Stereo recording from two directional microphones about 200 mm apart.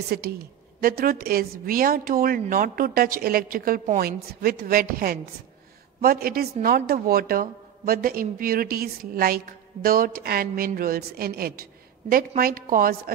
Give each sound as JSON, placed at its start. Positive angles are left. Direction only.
{"t": 0.1, "sound": "a woman's voice", "side_deg": -50}